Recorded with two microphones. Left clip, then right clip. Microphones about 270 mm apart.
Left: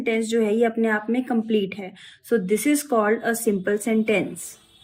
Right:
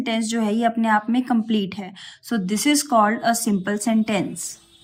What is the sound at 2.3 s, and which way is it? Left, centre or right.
Speech, centre.